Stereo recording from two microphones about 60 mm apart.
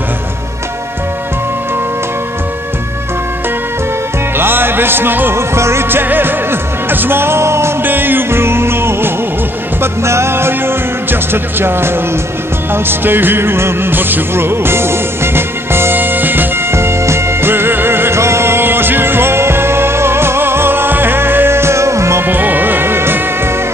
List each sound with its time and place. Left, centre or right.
4.4 s music: right
7.8 s music: right
16.7 s music: right
22.2 s music: right